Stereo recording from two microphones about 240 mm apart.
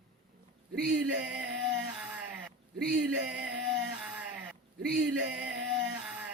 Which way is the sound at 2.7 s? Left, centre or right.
Right.